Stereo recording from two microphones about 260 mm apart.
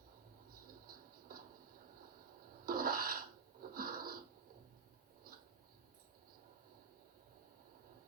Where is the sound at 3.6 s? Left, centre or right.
Right.